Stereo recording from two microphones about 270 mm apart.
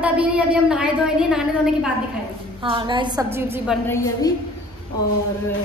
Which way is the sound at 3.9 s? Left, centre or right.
Centre.